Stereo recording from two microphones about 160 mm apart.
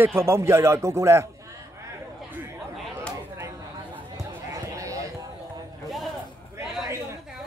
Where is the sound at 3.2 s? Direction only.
15° right (ahead or behind).